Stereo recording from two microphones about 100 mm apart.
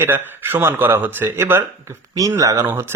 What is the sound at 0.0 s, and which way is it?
Speech, 20° right (ahead or behind).